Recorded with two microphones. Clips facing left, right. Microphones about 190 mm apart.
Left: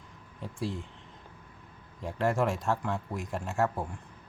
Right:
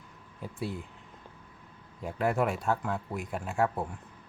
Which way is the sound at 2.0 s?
5° right (ahead or behind).